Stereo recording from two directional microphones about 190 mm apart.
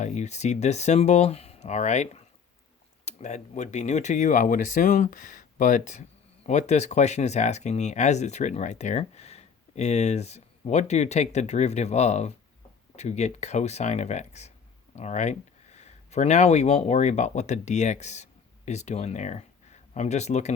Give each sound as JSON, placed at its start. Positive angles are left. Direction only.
{"t": 0.0, "sound": "speech", "side_deg": 35}